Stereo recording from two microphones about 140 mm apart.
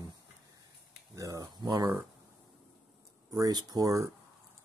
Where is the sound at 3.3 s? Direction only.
25° right (ahead or behind).